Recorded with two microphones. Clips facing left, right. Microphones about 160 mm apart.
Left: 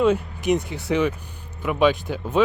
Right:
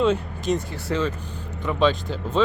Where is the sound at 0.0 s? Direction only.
10° left (ahead or behind).